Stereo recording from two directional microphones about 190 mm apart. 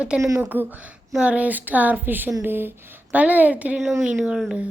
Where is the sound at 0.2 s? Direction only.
15° right (ahead or behind).